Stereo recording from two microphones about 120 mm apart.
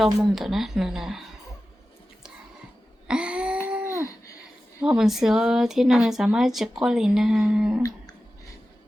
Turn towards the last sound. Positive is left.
turn(degrees=-5)  # may be behind; listen again after turning